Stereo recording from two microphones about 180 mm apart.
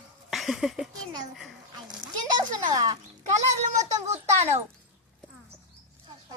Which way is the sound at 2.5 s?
20° right (ahead or behind).